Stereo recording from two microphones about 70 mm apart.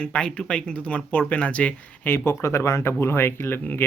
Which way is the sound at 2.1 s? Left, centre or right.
Left.